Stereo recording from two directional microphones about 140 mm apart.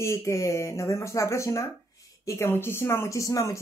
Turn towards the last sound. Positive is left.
turn(degrees=25)  # may be behind; listen again after turning